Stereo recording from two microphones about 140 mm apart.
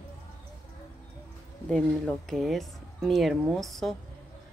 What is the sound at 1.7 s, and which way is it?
Speech, 5° left (ahead or behind).